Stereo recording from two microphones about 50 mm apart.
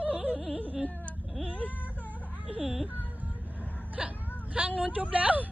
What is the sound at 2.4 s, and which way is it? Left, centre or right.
Speech, centre.